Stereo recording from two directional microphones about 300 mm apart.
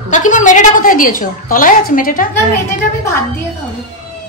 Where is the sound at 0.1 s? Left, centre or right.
Left.